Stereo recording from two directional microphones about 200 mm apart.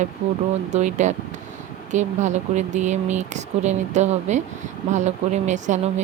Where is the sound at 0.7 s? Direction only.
35° right (ahead or behind).